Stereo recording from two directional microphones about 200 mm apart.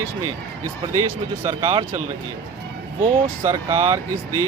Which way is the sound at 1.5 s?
25° right (ahead or behind).